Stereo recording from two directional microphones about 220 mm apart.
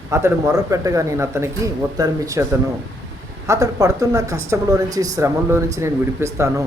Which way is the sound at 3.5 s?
15° right (ahead or behind).